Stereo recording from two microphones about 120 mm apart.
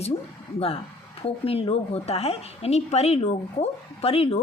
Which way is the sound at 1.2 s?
55° left (ahead or behind).